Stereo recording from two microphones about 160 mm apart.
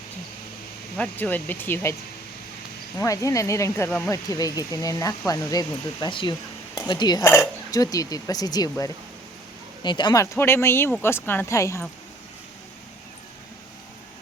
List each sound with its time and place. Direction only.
0.9 s speech: 10° left (ahead or behind)
3.0 s speech: 20° left (ahead or behind)